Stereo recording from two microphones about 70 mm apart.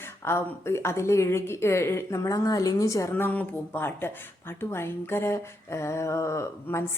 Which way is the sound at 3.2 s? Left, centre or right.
Left.